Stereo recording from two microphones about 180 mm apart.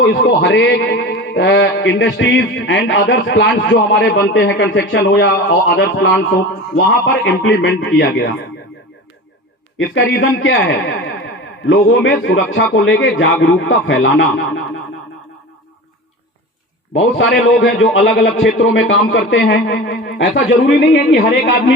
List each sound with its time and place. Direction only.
0.0 s a man's voice: 85° left; by 8.3 s 70° left (ahead or behind)
9.7 s a man's voice: 90° left
16.9 s a man's voice: 90° left
20.1 s a man's voice: 90° left